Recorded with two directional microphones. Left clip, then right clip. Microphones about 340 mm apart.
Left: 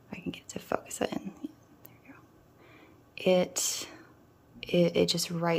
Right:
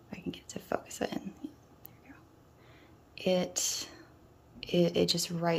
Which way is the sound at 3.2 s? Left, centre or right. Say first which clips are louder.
Left 4 dB; centre.